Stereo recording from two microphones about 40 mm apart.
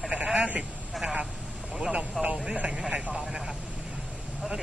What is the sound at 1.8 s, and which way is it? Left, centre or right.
Speech, right.